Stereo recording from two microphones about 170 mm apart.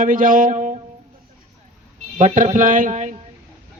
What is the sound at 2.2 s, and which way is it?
A man's voice, 50° right (ahead or behind).